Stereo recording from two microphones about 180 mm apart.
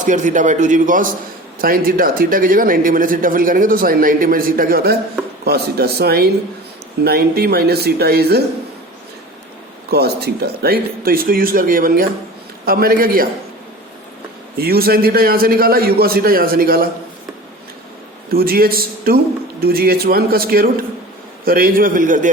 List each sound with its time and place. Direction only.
0.0 s a man's voice: 45° right (ahead or behind); by 8.4 s 60° right (ahead or behind)
9.9 s a man's voice: 60° right (ahead or behind)
14.6 s a man's voice: 60° right (ahead or behind)
18.3 s a man's voice: 55° right (ahead or behind)